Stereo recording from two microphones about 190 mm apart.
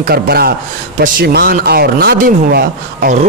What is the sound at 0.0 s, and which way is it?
Speech, 55° right (ahead or behind).